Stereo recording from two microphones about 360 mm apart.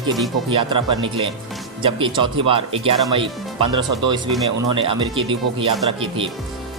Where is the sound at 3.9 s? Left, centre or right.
Right.